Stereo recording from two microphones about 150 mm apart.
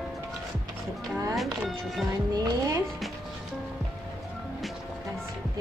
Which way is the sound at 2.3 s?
25° right (ahead or behind).